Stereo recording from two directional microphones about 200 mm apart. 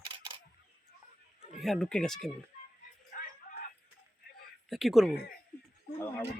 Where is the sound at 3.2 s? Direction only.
45° left (ahead or behind).